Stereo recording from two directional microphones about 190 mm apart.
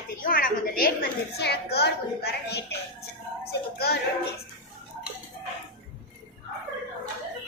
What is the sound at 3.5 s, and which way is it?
Music, 55° left (ahead or behind).